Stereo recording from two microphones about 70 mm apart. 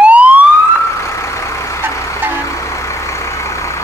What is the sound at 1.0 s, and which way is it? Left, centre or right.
Vehicle, left.